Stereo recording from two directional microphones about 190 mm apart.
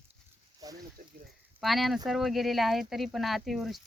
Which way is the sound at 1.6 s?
Centre (ahead or behind).